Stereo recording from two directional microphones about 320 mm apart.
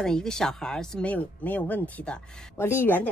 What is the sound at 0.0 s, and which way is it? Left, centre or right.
Speech, centre.